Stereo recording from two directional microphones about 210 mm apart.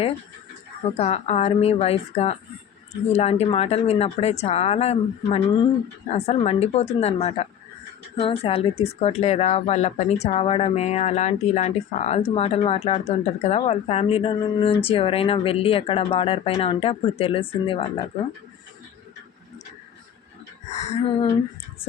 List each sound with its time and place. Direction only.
0.9 s speech: 30° left (ahead or behind)
20.7 s speech: 30° left (ahead or behind)